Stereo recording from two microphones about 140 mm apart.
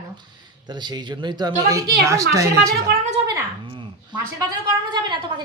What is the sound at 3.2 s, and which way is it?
Speech, 45° right (ahead or behind).